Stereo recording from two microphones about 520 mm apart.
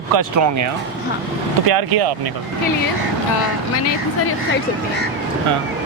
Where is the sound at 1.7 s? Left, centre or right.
Right.